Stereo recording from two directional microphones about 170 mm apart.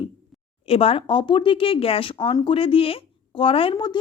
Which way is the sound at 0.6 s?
35° left (ahead or behind).